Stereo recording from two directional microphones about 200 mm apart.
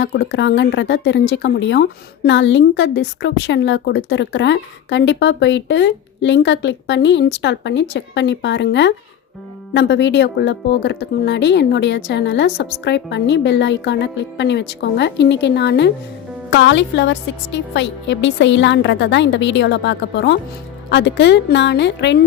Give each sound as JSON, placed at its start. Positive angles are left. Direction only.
{"t": 0.0, "sound": "speech", "side_deg": 60}